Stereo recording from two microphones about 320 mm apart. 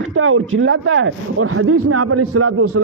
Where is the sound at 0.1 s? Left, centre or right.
Right.